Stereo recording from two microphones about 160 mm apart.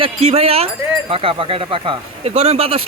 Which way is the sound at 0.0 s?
40° right (ahead or behind).